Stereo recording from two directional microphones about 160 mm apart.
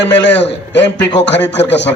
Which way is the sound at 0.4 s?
90° left.